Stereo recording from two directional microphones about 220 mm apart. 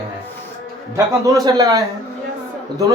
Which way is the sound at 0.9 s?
15° right (ahead or behind).